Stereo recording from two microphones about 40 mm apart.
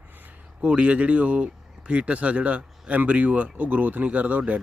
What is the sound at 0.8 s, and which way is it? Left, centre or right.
Speech, right.